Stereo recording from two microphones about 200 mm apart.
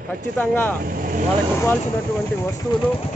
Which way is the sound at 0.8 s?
45° right (ahead or behind).